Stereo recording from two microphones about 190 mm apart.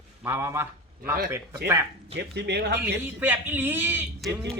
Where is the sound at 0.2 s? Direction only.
10° right (ahead or behind).